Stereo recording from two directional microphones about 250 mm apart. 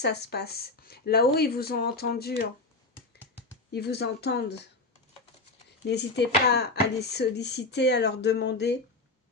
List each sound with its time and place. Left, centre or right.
0.0 s speech: left
3.7 s speech: left
5.8 s speech: left